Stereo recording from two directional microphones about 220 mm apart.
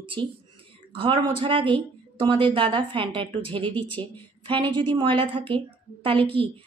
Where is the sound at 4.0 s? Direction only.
20° right (ahead or behind).